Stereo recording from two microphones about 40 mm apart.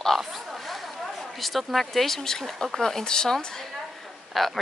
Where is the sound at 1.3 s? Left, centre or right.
Centre.